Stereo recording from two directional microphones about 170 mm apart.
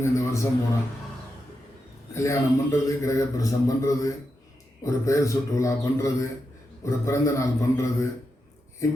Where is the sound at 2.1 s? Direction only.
15° left (ahead or behind).